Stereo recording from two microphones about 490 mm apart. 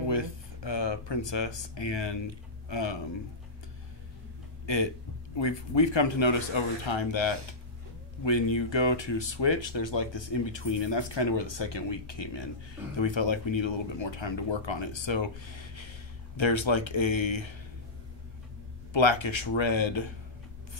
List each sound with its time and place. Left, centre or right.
0.1 s speech: left
5.3 s speech: left
18.9 s speech: left